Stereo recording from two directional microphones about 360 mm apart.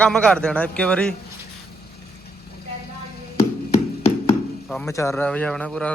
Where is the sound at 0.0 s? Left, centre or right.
Centre.